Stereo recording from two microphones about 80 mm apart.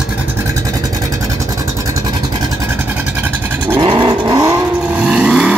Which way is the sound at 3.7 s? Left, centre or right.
Right.